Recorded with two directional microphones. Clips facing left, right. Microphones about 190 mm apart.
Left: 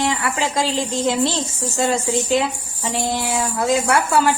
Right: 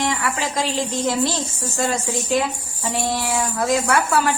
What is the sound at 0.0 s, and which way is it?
A woman's voice, 30° left (ahead or behind).